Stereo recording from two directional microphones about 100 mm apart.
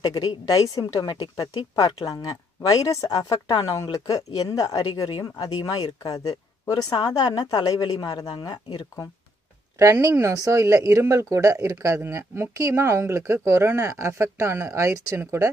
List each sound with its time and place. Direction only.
0.0 s speech: 45° left (ahead or behind)
10.3 s speech: 35° right (ahead or behind)